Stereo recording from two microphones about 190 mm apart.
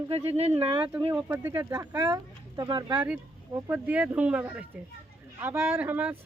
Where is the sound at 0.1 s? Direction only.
30° right (ahead or behind).